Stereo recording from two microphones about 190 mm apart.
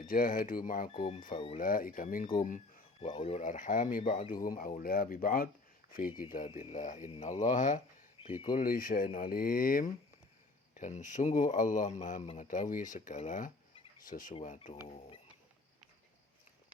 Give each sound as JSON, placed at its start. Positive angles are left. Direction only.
{"t": 0.0, "sound": "speech", "side_deg": 45}
{"t": 0.9, "sound": "speech", "side_deg": 25}
{"t": 1.5, "sound": "speech", "side_deg": 45}
{"t": 6.5, "sound": "speech", "side_deg": 35}
{"t": 8.2, "sound": "a sound", "side_deg": 25}
{"t": 8.5, "sound": "speech", "side_deg": 45}